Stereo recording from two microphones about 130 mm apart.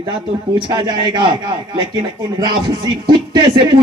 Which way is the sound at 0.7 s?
35° right (ahead or behind).